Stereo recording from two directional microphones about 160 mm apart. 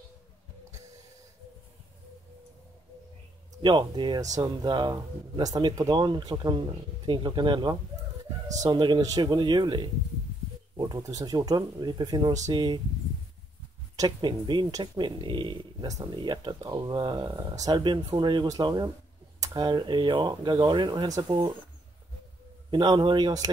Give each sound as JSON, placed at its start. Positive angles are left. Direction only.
{"t": 3.6, "sound": "speech", "side_deg": -30}
{"t": 13.9, "sound": "speech", "side_deg": -25}
{"t": 22.7, "sound": "speech", "side_deg": -30}